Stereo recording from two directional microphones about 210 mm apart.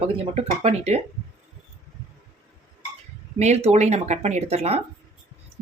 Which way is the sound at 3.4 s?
30° right (ahead or behind).